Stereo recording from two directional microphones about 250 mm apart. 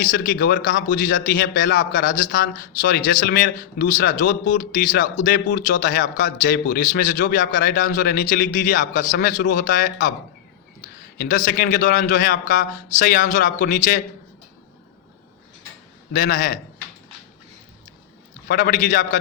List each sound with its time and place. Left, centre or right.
0.1 s a man's voice: left
11.2 s a man's voice: left
16.1 s a man's voice: left
18.4 s a man's voice: left